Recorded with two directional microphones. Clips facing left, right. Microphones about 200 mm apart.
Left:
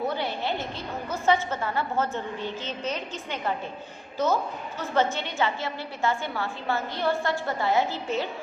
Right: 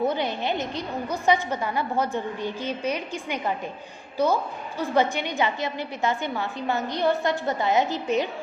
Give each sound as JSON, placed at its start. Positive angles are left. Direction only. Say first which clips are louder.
{"t": 0.1, "sound": "a woman's voice", "louder": "right 3 dB", "side_deg": -20}